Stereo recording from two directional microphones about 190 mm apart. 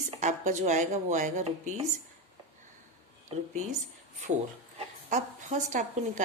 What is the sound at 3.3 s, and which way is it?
Speech, 30° right (ahead or behind).